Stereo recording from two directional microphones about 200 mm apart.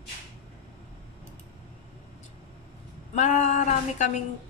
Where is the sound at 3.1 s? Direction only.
35° left (ahead or behind).